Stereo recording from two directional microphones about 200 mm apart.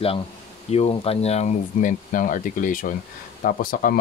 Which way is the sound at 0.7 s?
30° left (ahead or behind).